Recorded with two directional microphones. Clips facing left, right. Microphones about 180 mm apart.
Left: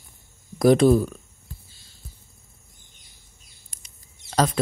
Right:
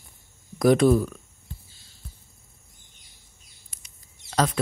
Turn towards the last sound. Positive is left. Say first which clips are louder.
# left 2 dB
turn(degrees=35)  # may be behind; listen again after turning